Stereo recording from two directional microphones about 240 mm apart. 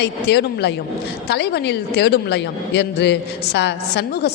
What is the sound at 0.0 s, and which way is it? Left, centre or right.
A woman's voice, left.